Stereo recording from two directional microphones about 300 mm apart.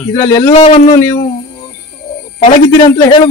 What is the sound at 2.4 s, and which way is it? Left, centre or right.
Speech, centre.